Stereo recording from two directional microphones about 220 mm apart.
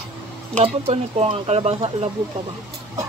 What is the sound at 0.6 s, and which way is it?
Speech, 25° right (ahead or behind).